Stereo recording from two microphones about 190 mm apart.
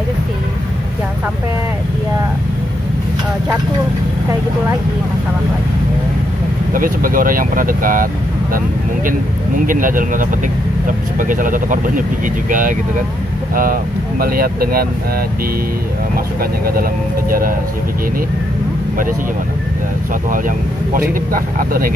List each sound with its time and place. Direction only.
6.7 s speech: 45° right (ahead or behind)
9.7 s speech: 45° right (ahead or behind)
14.2 s speech: 50° right (ahead or behind)
17.3 s speech: 50° right (ahead or behind)
20.2 s speech: 45° right (ahead or behind)